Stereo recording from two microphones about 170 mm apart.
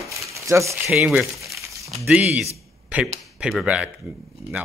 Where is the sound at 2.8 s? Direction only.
5° right (ahead or behind).